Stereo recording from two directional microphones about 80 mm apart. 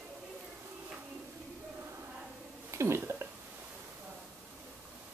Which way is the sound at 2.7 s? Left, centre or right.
Right.